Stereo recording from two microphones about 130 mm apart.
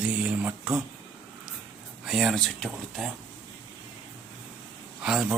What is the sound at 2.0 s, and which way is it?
Speech, 5° right (ahead or behind).